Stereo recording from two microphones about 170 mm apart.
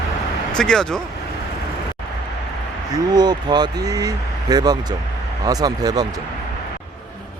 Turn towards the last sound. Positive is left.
turn(degrees=-20)  # may be behind; listen again after turning